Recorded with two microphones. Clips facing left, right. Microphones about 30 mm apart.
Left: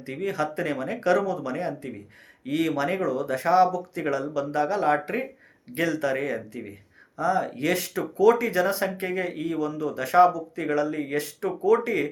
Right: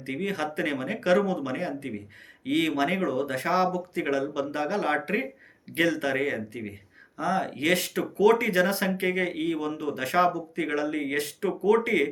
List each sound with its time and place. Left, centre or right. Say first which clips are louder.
0.0 s speech: left 2 dB; right
3.0 s speech: left 2 dB; right
10.2 s speech: left 2 dB; right